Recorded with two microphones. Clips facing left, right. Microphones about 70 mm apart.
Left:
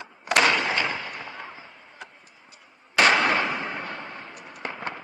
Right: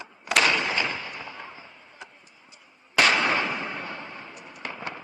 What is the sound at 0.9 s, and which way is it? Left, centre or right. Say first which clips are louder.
Fireworks: left 2 dB; left.